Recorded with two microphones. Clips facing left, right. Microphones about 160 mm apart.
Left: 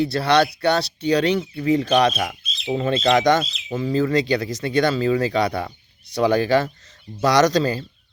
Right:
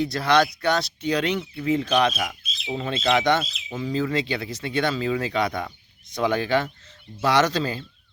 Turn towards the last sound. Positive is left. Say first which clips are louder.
# left 5 dB
turn(degrees=40)  # may be behind; listen again after turning